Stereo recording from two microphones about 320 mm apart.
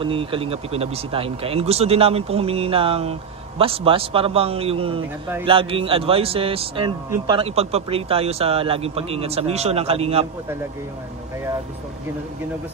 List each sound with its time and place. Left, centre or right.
0.0 s speech: centre